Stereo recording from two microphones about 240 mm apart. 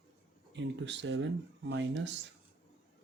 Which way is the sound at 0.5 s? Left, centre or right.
Right.